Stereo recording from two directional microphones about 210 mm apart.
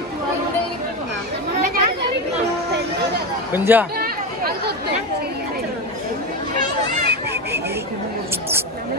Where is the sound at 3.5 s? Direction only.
10° right (ahead or behind).